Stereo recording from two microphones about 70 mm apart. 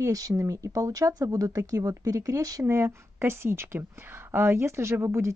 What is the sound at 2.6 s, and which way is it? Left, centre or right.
Speech, right.